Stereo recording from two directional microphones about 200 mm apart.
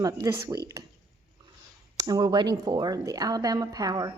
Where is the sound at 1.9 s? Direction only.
20° right (ahead or behind).